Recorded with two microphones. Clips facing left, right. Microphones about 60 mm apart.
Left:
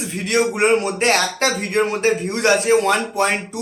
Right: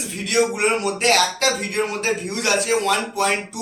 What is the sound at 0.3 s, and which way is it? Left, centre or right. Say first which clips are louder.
Speech: left 3 dB; left.